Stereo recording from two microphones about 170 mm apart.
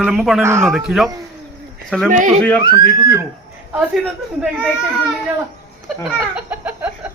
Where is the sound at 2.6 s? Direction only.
25° right (ahead or behind).